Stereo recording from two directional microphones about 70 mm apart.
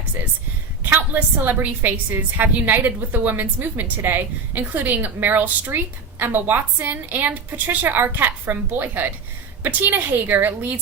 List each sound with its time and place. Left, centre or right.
0.9 s a woman's voice: right